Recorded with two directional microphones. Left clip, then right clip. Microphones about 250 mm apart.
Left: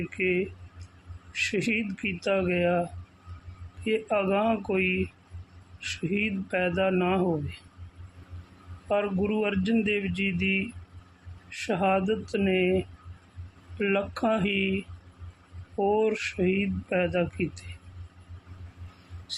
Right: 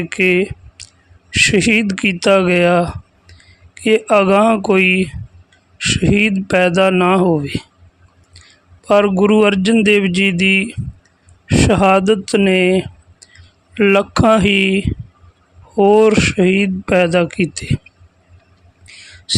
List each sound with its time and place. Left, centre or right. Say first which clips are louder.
0.2 s speech: right 13 dB; right
3.8 s speech: right 14 dB; right
8.9 s speech: right 15 dB; right